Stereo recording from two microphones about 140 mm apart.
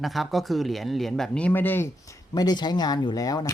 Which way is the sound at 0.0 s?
Centre (ahead or behind).